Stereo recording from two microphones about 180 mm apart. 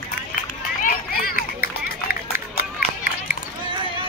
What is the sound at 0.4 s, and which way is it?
Run, 55° left (ahead or behind).